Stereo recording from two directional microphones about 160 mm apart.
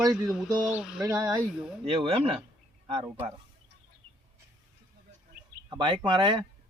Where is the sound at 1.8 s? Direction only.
35° right (ahead or behind).